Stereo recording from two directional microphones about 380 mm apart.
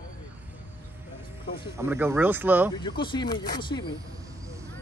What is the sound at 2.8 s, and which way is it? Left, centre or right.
Speech, centre.